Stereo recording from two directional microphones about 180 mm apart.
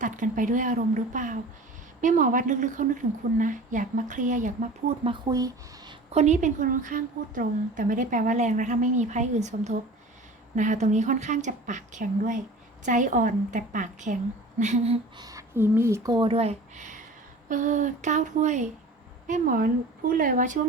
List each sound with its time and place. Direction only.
0.0 s a woman's voice: 45° right (ahead or behind)
5.0 s speech: 25° right (ahead or behind)
6.1 s a woman's voice: 40° right (ahead or behind)
15.2 s a woman's voice: 20° right (ahead or behind); by 20.6 s 45° right (ahead or behind)